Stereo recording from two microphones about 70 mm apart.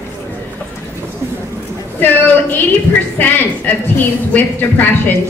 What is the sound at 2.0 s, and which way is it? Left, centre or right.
Speech, left.